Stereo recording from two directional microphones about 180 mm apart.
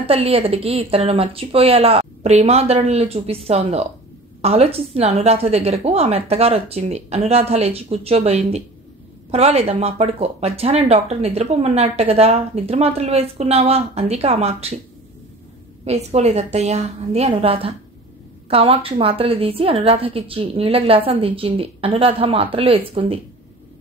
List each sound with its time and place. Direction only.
0.0 s speech: 35° right (ahead or behind)
15.8 s speech: 35° right (ahead or behind)